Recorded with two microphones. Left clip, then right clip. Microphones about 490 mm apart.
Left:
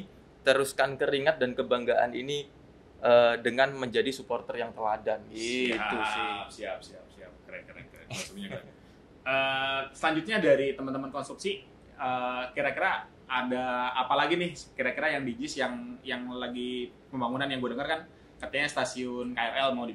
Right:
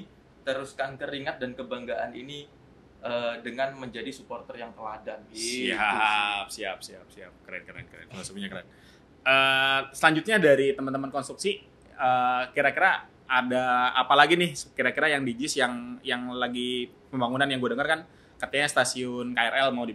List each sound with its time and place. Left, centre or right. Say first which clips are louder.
0.4 s speech: left 6 dB; left
5.8 s speech: right 6 dB; right
9.2 s speech: right 7 dB; right